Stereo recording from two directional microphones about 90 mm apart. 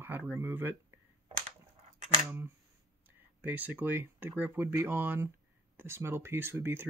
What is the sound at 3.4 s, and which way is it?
Speech, 20° right (ahead or behind).